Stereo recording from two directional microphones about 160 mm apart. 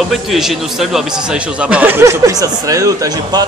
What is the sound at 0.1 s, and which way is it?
A man's voice, centre (ahead or behind).